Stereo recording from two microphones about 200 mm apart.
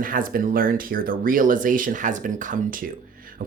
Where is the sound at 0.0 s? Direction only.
45° right (ahead or behind).